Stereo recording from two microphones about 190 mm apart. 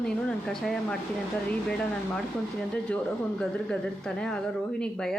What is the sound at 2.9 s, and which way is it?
Speech, 5° left (ahead or behind).